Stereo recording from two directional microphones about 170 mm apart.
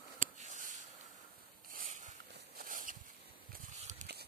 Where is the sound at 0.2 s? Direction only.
50° right (ahead or behind).